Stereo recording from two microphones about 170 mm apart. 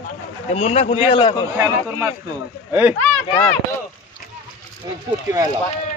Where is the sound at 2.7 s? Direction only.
15° right (ahead or behind).